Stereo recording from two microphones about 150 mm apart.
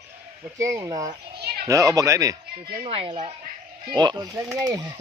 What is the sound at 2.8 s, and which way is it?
Speech, 40° right (ahead or behind).